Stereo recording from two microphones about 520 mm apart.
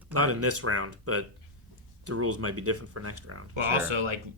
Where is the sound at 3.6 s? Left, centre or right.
Right.